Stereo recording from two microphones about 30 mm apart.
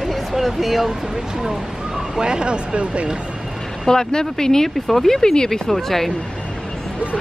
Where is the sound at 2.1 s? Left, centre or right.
Right.